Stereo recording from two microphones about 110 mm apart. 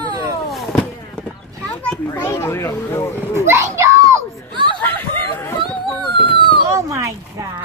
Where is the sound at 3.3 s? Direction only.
25° right (ahead or behind).